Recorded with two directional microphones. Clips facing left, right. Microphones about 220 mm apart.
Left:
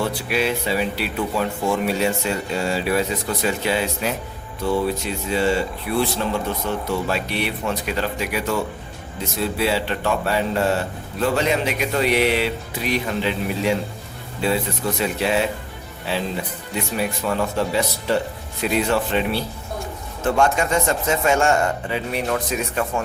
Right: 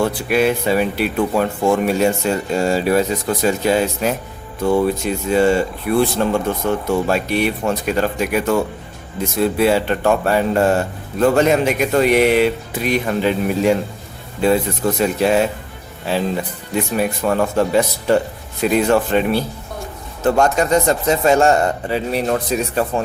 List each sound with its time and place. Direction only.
0.0 s a man's voice: 50° right (ahead or behind)
17.0 s a man's voice: 50° right (ahead or behind)